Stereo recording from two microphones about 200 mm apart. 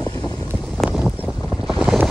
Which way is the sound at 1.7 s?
5° right (ahead or behind).